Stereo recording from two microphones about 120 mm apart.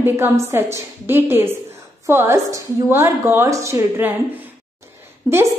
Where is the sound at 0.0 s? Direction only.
20° right (ahead or behind).